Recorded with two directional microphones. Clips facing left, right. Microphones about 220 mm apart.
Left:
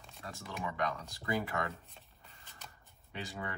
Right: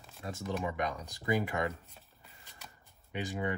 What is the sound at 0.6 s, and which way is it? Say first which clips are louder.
Speech: right 2 dB; 20° right (ahead or behind).